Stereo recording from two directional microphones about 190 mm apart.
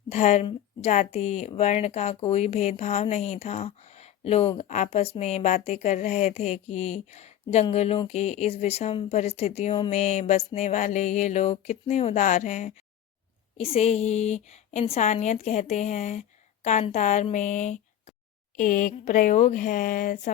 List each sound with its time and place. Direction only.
0.1 s a woman's voice: 35° left (ahead or behind)